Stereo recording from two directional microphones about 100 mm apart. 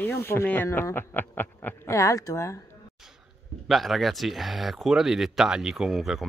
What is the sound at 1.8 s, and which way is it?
Speech, 30° left (ahead or behind).